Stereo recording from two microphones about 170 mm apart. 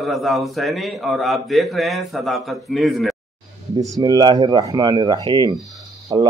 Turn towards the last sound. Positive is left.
turn(degrees=-25)  # may be behind; listen again after turning